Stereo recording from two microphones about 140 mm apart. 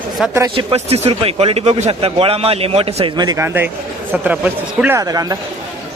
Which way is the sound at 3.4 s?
15° right (ahead or behind).